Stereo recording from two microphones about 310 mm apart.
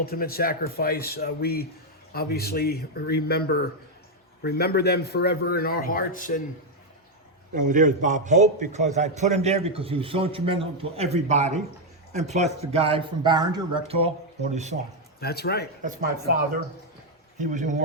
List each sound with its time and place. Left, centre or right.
0.0 s a man's voice: left
7.5 s a man's voice: right
15.2 s a man's voice: left
15.8 s speech: right
17.3 s a man's voice: right